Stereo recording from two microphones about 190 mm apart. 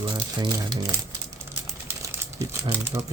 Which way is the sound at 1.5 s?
10° right (ahead or behind).